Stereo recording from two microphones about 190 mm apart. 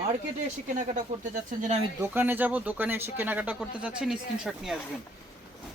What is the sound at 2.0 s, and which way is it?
Speech, 10° right (ahead or behind).